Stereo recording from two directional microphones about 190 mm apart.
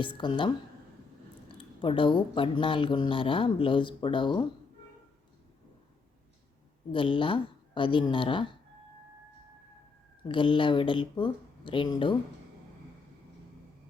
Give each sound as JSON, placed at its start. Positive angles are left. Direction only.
{"t": 0.0, "sound": "speech", "side_deg": 25}
{"t": 1.5, "sound": "speech", "side_deg": 25}
{"t": 6.9, "sound": "speech", "side_deg": 25}
{"t": 10.2, "sound": "speech", "side_deg": 25}